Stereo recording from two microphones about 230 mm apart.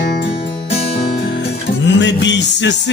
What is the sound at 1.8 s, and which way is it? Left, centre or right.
Music, left.